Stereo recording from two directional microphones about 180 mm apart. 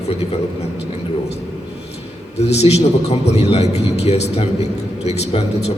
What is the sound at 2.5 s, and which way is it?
A man's voice, 35° left (ahead or behind).